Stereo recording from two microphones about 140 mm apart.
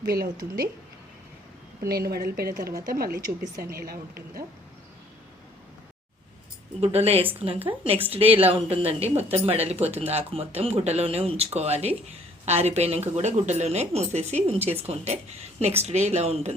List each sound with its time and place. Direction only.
0.0 s speech: 90° right
1.9 s speech: 90° right
3.2 s a woman's voice: 25° right (ahead or behind)
3.6 s speech: 90° right
6.8 s a woman's voice: 45° right (ahead or behind)